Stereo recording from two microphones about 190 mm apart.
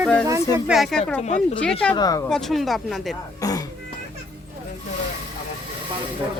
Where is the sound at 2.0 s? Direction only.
20° left (ahead or behind).